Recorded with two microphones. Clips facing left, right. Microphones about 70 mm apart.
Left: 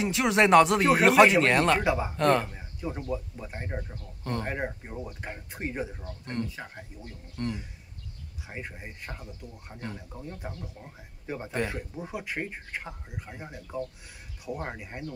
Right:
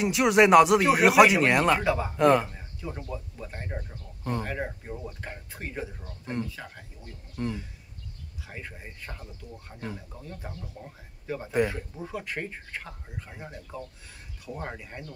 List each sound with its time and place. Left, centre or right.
0.0 s speech: centre
1.8 s speech: centre
2.1 s speech: centre
2.5 s speech: centre
4.2 s speech: centre
4.5 s speech: centre
6.2 s speech: centre
6.5 s speech: centre
7.4 s speech: centre
8.5 s speech: centre